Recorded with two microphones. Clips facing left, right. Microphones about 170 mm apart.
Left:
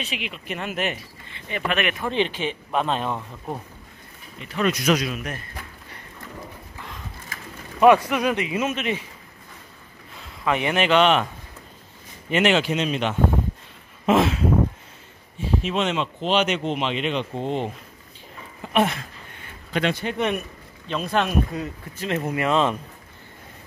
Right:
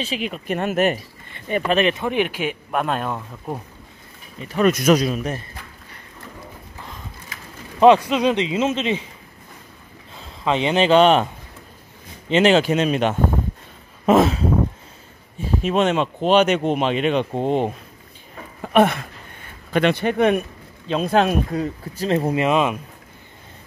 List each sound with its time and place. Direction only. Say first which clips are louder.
0.0 s speech: right 6 dB; 35° right (ahead or behind)
1.8 s speech: right 6 dB; 30° right (ahead or behind)
2.0 s speech: right 2 dB; 10° right (ahead or behind)
4.6 s speech: right 5 dB; 45° right (ahead or behind)
7.8 s speech: right 3 dB; 20° right (ahead or behind)
10.4 s speech: right 4 dB; 25° right (ahead or behind)
12.3 s speech: right 5 dB; 30° right (ahead or behind)
15.4 s speech: right 5 dB; 45° right (ahead or behind)
18.6 s a sound: right 5 dB; 55° right (ahead or behind)
19.7 s speech: right 6 dB; 60° right (ahead or behind)
20.9 s speech: right 5 dB; 40° right (ahead or behind)
22.3 s speech: left 1 dB; 20° right (ahead or behind)